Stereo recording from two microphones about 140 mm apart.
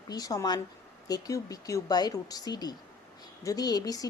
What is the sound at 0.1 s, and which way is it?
Speech, 25° left (ahead or behind).